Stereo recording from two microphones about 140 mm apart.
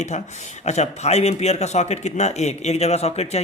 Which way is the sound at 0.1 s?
55° left (ahead or behind).